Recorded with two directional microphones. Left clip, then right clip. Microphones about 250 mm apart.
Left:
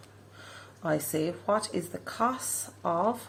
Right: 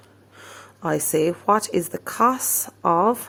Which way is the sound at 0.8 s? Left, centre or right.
Right.